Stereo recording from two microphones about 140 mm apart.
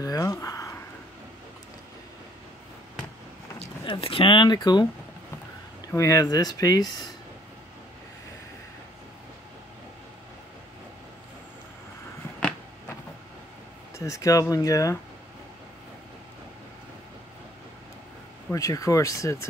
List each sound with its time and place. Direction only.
0.0 s speech: 25° left (ahead or behind)
3.5 s speech: 40° left (ahead or behind)
5.9 s speech: 25° left (ahead or behind)
13.9 s speech: 20° left (ahead or behind)
18.5 s speech: 25° left (ahead or behind)